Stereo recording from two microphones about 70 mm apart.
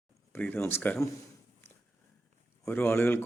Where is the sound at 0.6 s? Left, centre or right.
Left.